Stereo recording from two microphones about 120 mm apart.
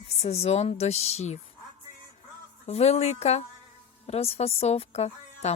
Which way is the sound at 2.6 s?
60° left (ahead or behind).